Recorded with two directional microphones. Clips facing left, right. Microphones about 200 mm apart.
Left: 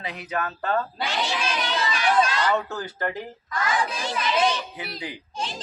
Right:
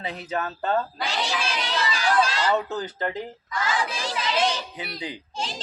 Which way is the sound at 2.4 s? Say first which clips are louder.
Right 1 dB; 20° right (ahead or behind).